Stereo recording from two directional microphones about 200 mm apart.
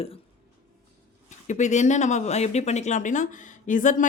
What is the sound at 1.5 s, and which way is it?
Speech, 35° left (ahead or behind).